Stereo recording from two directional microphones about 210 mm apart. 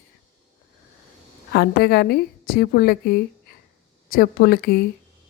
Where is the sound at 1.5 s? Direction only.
50° left (ahead or behind).